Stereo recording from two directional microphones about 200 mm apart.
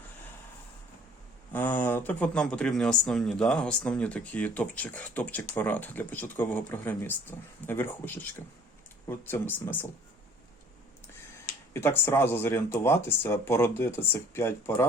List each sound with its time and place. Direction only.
1.5 s speech: 10° left (ahead or behind)
11.7 s speech: 10° left (ahead or behind)